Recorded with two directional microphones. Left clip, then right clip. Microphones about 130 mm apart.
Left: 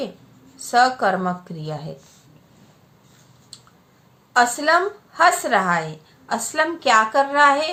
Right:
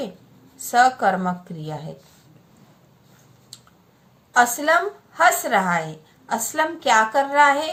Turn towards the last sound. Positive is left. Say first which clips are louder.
# left 1 dB
turn(degrees=30)  # may be behind; listen again after turning